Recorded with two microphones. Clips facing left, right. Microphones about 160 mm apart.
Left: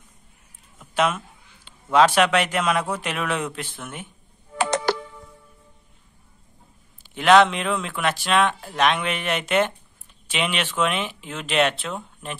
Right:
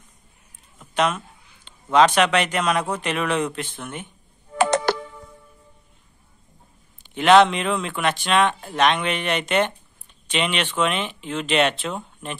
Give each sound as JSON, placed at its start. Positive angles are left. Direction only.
{"t": 0.7, "sound": "a man's voice", "side_deg": 5}
{"t": 4.6, "sound": "music", "side_deg": -50}
{"t": 7.0, "sound": "speech", "side_deg": 0}